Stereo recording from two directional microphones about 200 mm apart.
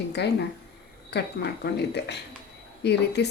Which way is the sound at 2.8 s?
55° left (ahead or behind).